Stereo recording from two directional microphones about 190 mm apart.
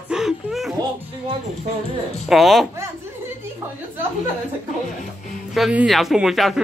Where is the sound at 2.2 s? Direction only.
Centre (ahead or behind).